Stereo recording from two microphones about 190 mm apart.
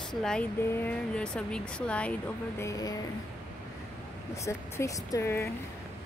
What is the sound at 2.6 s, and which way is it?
Speech, 20° left (ahead or behind).